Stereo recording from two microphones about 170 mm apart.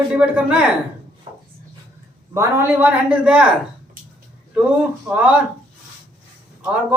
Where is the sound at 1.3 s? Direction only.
35° right (ahead or behind).